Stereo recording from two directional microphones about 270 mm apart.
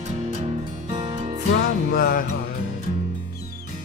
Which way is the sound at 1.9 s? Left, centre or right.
Left.